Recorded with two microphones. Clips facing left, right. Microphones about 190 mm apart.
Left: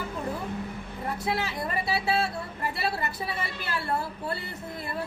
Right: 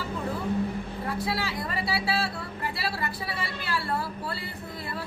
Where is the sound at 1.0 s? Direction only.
20° left (ahead or behind).